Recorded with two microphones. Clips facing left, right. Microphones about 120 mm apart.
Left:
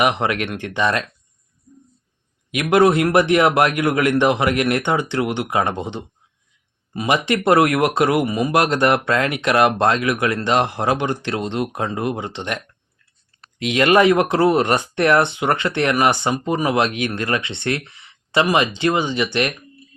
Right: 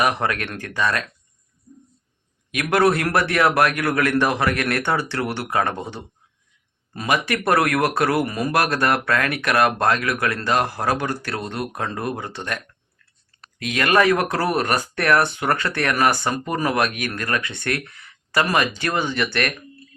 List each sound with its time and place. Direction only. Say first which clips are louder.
0.0 s speech: left 3 dB; 20° left (ahead or behind)
2.5 s speech: left 3 dB; 20° left (ahead or behind)